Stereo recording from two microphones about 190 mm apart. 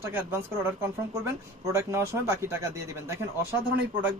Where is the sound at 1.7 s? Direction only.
15° right (ahead or behind).